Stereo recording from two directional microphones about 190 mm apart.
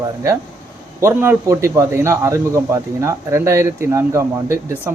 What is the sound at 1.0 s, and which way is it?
A man's voice, 15° right (ahead or behind).